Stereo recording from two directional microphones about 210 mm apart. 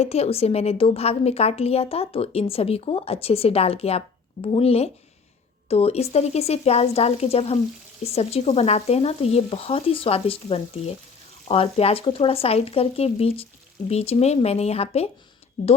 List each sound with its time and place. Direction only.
0.0 s a woman's voice: 30° left (ahead or behind)